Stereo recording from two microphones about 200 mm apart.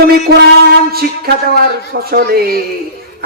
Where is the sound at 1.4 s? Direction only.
50° right (ahead or behind).